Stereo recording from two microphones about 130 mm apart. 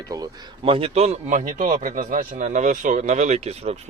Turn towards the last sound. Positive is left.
turn(degrees=-55)  # may be behind; listen again after turning